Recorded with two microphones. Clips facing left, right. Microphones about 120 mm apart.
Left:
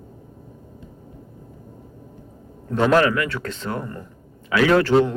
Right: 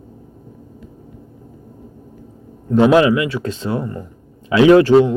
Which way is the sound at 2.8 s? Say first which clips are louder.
Right 5 dB; 15° right (ahead or behind).